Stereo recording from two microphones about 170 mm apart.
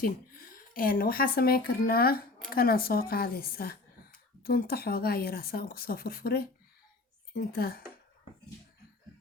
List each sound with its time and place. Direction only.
0.0 s a woman's voice: 60° left (ahead or behind)